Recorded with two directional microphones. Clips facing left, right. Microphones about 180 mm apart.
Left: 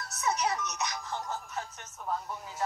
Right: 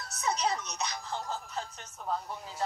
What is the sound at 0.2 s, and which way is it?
Speech, 30° right (ahead or behind).